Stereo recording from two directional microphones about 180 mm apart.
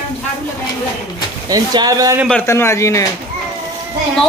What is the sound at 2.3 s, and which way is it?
Speech, 10° left (ahead or behind).